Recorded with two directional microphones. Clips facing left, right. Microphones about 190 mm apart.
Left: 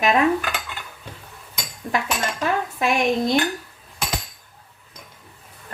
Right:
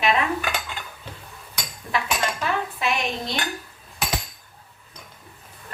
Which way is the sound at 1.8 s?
40° left (ahead or behind).